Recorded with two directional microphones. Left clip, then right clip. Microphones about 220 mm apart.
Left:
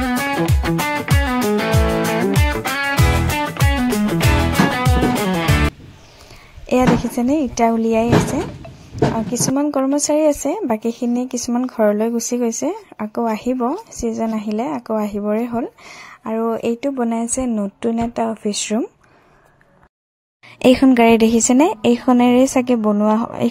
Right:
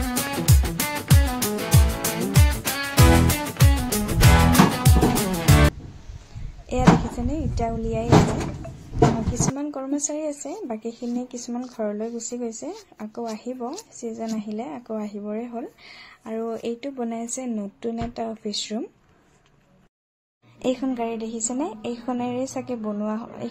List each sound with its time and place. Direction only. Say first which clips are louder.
0.0 s music: left 8 dB; centre (ahead or behind)
6.7 s a sound: left 10 dB; 40° left (ahead or behind)
7.2 s speech: left 15 dB; 40° left (ahead or behind)
9.3 s speech: left 9 dB; 35° left (ahead or behind)
20.6 s a woman's voice: left 14 dB; 45° left (ahead or behind)